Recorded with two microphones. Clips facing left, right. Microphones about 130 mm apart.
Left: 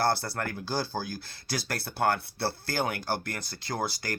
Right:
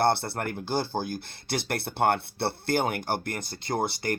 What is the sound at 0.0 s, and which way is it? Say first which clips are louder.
Speech: right 3 dB; 25° right (ahead or behind).